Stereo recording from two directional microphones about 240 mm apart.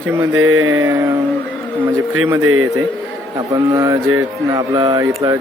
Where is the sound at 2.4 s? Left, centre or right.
Right.